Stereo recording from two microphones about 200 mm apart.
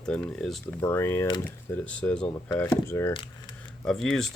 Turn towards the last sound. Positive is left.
turn(degrees=0)  # may be behind; listen again after turning